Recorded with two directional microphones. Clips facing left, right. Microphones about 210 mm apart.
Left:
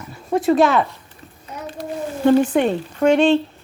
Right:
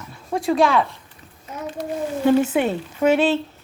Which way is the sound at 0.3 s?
Centre (ahead or behind).